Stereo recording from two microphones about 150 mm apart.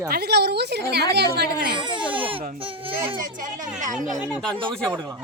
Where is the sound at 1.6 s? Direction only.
30° right (ahead or behind).